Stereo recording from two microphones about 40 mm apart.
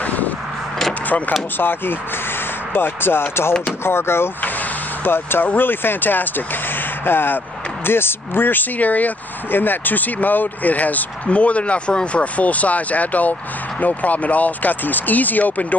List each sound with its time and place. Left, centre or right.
0.0 s a sound: left
1.6 s speech: left
4.4 s vehicle: left
5.1 s speech: left
9.5 s speech: left
11.2 s speech: left